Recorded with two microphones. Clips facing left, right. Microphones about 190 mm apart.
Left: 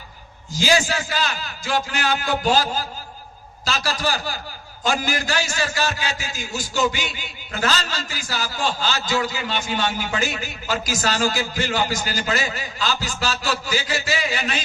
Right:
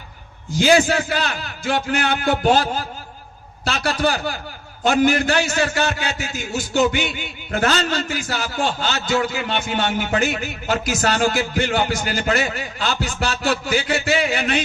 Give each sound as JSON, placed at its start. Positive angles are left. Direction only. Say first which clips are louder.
{"t": 0.5, "sound": "a man's voice", "louder": "right 5 dB", "side_deg": -60}